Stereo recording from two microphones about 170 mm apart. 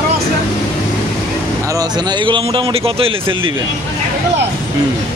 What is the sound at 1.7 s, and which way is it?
A man's voice, 25° right (ahead or behind).